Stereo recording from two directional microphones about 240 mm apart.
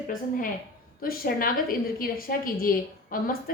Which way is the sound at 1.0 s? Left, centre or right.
Left.